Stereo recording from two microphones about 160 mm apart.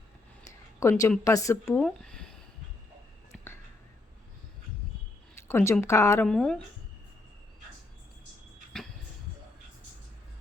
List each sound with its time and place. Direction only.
0.8 s a woman's voice: 15° left (ahead or behind)
1.8 s a sound: 5° left (ahead or behind)
5.5 s speech: 15° left (ahead or behind)
6.2 s speech: 5° left (ahead or behind)